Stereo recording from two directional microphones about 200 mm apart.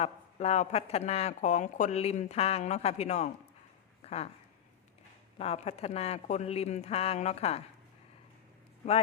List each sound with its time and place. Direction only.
0.0 s speech: 35° left (ahead or behind)
5.4 s speech: 30° left (ahead or behind)